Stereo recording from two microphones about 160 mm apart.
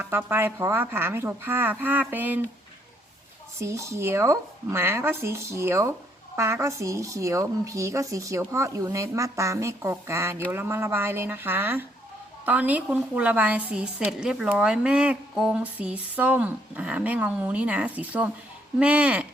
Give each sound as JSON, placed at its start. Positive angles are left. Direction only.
{"t": 0.0, "sound": "a woman's voice", "side_deg": -15}
{"t": 3.6, "sound": "a woman's voice", "side_deg": -20}